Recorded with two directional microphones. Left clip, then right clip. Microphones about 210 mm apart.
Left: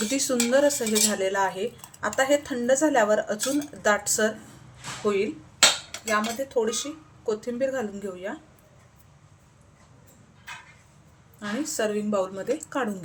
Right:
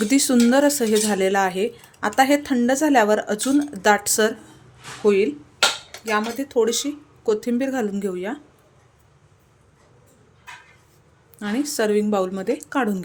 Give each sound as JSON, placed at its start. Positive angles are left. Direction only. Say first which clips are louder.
{"t": 0.0, "sound": "speech", "louder": "right 7 dB", "side_deg": -45}
{"t": 6.1, "sound": "speech", "louder": "right 3 dB", "side_deg": -50}
{"t": 11.3, "sound": "speech", "louder": "right 5 dB", "side_deg": -45}